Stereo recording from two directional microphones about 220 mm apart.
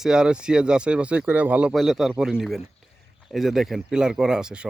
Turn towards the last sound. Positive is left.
turn(degrees=-5)  # may be behind; listen again after turning